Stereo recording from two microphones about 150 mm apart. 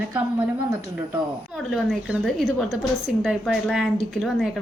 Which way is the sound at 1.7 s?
5° right (ahead or behind).